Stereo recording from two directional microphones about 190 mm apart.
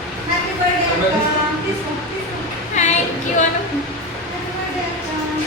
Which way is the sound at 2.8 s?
40° left (ahead or behind).